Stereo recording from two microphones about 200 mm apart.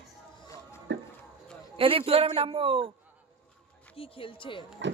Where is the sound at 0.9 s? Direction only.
65° right (ahead or behind).